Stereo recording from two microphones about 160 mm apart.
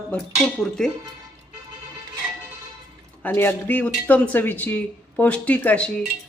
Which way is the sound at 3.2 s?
10° left (ahead or behind).